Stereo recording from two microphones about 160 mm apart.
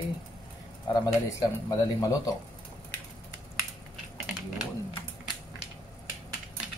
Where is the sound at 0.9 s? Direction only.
20° left (ahead or behind).